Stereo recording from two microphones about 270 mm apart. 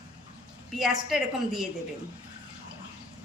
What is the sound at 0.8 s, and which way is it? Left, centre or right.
Speech, centre.